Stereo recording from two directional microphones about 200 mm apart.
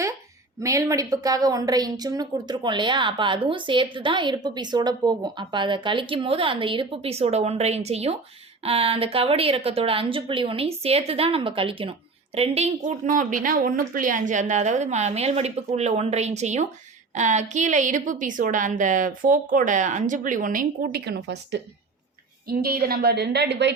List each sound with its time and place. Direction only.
0.6 s a woman's voice: 15° right (ahead or behind); by 23.7 s 60° right (ahead or behind)